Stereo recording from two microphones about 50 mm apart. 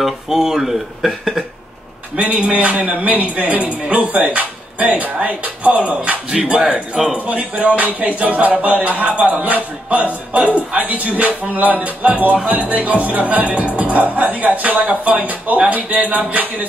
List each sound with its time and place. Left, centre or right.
0.0 s speech: centre
2.1 s a man's voice: right; by 7.2 s centre
7.2 s speech: right
10.3 s music: right
12.4 s speech: right